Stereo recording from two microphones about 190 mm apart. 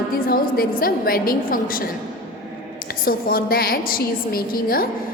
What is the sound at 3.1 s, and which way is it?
A woman's voice, 50° left (ahead or behind).